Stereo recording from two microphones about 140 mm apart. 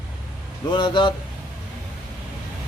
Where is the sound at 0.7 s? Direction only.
35° left (ahead or behind).